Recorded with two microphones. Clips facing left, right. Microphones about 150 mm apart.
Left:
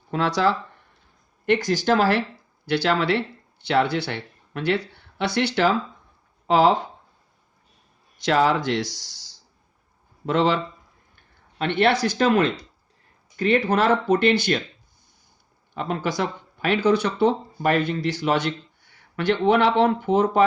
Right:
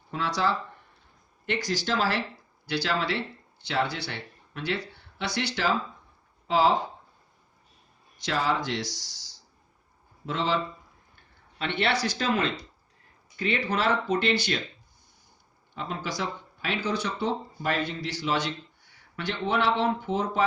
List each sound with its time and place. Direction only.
0.1 s speech: 75° left (ahead or behind)
1.5 s speech: 50° left (ahead or behind)
8.2 s speech: 65° left (ahead or behind)
10.2 s speech: 65° left (ahead or behind)
11.5 s speech: 50° left (ahead or behind)
15.7 s speech: 60° left (ahead or behind)